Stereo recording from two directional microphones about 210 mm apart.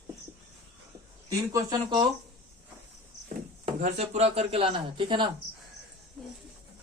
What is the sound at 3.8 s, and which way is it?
Speech, 35° right (ahead or behind).